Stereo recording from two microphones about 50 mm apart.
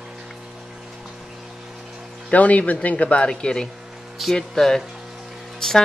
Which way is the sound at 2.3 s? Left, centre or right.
Left.